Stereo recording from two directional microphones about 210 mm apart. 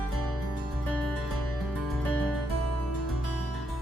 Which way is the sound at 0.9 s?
5° left (ahead or behind).